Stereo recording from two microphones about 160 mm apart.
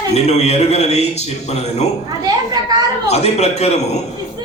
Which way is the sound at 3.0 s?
45° left (ahead or behind).